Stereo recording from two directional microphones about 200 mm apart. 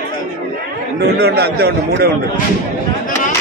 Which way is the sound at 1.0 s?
55° right (ahead or behind).